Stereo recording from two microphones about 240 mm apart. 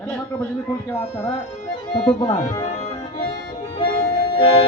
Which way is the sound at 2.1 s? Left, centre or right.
Centre.